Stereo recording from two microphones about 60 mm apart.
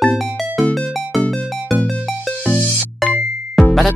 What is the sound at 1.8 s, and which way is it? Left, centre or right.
Music, centre.